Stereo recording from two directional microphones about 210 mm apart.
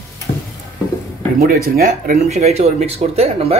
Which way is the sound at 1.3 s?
45° right (ahead or behind).